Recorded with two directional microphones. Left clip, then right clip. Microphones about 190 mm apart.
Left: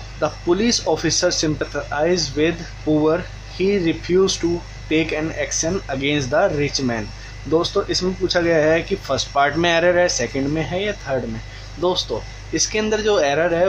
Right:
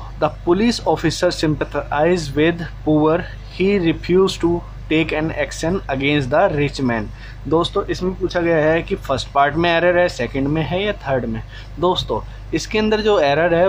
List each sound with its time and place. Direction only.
0.2 s speech: 5° right (ahead or behind)